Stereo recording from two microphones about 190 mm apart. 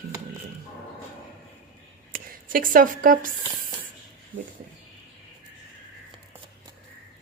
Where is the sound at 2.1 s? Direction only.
50° right (ahead or behind).